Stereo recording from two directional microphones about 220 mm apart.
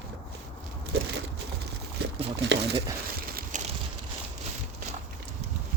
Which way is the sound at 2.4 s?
55° right (ahead or behind).